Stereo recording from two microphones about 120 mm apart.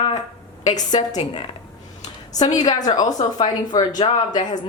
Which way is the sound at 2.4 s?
35° left (ahead or behind).